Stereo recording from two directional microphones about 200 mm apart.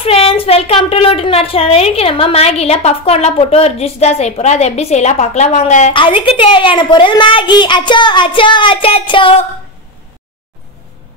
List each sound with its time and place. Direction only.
0.0 s a woman's voice: 30° left (ahead or behind)
5.9 s a child's voice: 25° left (ahead or behind)